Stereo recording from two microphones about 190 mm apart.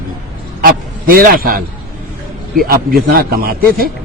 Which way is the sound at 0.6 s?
45° right (ahead or behind).